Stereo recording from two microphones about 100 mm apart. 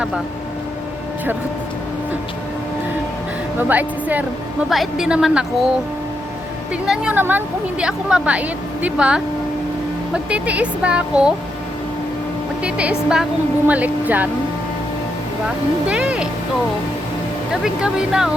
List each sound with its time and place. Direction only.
3.6 s a woman's voice: 15° right (ahead or behind)
4.7 s a woman's voice: 5° right (ahead or behind)
6.8 s speech: 5° right (ahead or behind)
7.1 s a woman's voice: 20° right (ahead or behind)
12.6 s a woman's voice: 10° right (ahead or behind)
15.9 s a woman's voice: 10° right (ahead or behind)
17.5 s a woman's voice: 5° right (ahead or behind)